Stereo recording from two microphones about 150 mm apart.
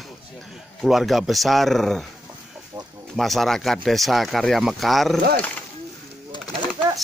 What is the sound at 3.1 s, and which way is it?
Speech, centre (ahead or behind).